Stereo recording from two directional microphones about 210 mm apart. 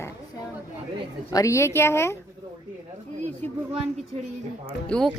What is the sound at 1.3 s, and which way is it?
Speech, 15° left (ahead or behind).